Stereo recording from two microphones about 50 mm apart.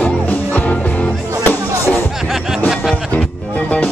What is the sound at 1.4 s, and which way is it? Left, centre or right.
Music, left.